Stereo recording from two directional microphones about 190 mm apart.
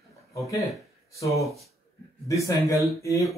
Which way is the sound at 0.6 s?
15° left (ahead or behind).